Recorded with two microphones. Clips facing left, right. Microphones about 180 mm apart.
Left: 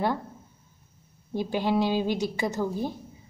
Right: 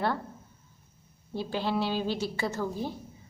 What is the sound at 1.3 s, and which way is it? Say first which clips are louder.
A woman's voice: left 4 dB; 15° left (ahead or behind).